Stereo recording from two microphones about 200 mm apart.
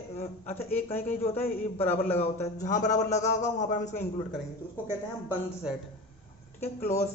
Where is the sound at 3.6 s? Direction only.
40° left (ahead or behind).